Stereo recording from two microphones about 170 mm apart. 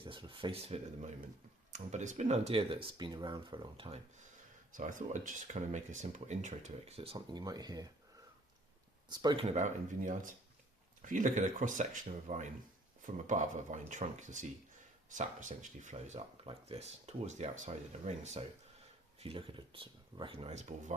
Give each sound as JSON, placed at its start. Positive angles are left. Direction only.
{"t": 0.0, "sound": "speech", "side_deg": -30}
{"t": 4.7, "sound": "speech", "side_deg": -50}
{"t": 9.0, "sound": "speech", "side_deg": -25}